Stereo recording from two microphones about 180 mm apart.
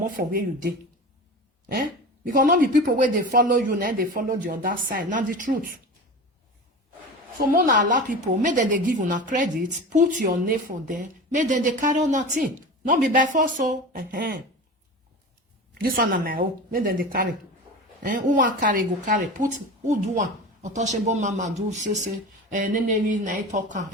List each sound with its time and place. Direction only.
0.0 s a woman's voice: 50° right (ahead or behind)
2.2 s a woman's voice: 50° right (ahead or behind)
7.3 s a woman's voice: 45° right (ahead or behind)
15.8 s a woman's voice: 55° right (ahead or behind)